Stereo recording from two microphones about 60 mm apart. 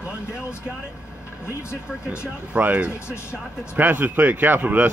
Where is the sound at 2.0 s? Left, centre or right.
Right.